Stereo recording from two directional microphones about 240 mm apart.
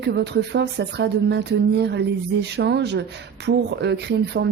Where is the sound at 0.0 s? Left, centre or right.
Right.